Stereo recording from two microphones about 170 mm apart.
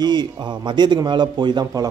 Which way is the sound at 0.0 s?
25° right (ahead or behind).